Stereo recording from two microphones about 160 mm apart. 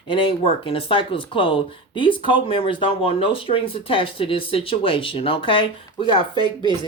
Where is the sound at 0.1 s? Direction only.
35° left (ahead or behind).